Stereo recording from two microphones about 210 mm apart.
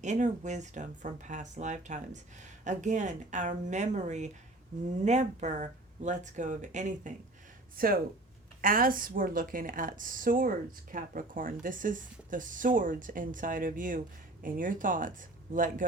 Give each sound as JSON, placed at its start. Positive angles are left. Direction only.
{"t": 0.0, "sound": "a woman's voice", "side_deg": -35}